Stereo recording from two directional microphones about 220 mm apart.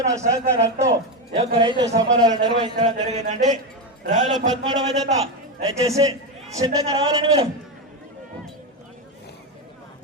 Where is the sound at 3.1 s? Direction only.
30° right (ahead or behind).